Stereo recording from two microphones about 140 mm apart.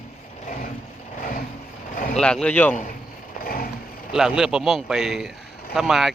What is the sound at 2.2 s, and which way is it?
Speech, 5° left (ahead or behind).